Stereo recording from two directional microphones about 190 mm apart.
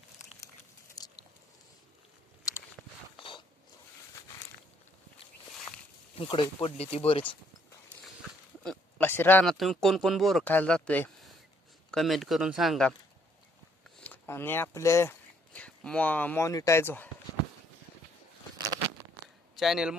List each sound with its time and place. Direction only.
0.9 s a sound: 20° left (ahead or behind)
2.4 s a sound: 15° left (ahead or behind)
5.5 s walk: 5° left (ahead or behind)
6.1 s speech: 25° left (ahead or behind)
8.6 s speech: 5° left (ahead or behind)
14.0 s speech: 10° left (ahead or behind)
19.5 s speech: centre (ahead or behind)